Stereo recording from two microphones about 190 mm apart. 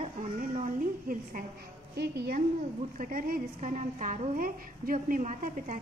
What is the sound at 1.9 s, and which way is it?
Speech, 60° right (ahead or behind).